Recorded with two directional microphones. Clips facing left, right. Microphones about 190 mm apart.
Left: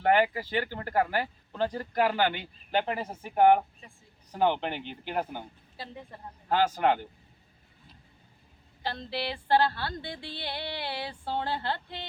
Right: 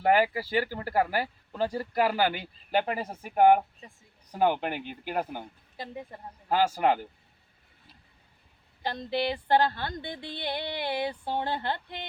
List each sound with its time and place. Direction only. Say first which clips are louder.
0.0 s speech: right 1 dB; 10° right (ahead or behind)
8.8 s speech: right 4 dB; 15° right (ahead or behind)